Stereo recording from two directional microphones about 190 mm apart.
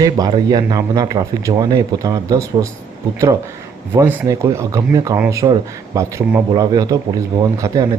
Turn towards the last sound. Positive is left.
turn(degrees=-20)  # may be behind; listen again after turning